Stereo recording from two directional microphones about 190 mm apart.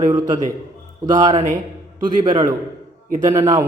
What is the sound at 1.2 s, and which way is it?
Speech, 35° right (ahead or behind).